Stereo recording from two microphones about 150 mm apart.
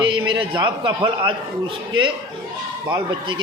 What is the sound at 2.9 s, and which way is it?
Speech, 30° right (ahead or behind).